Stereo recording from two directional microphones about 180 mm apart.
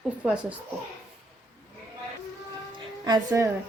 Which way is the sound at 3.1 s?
20° right (ahead or behind).